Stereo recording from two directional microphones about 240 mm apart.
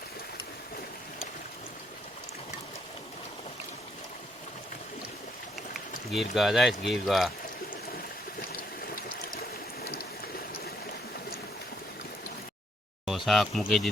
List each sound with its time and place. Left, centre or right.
6.1 s speech: centre
9.8 s a sound: left
13.1 s speech: centre